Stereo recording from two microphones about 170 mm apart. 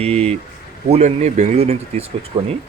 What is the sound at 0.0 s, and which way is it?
Speech, 40° right (ahead or behind).